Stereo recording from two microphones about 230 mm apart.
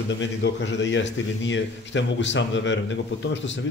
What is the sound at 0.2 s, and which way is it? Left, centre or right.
A man's voice, left.